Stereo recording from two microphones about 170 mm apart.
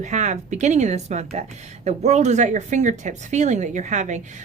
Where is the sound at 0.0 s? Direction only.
45° right (ahead or behind).